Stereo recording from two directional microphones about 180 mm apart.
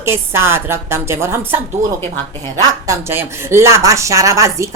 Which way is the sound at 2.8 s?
15° right (ahead or behind).